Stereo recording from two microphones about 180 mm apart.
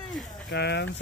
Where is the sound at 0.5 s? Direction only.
70° left (ahead or behind).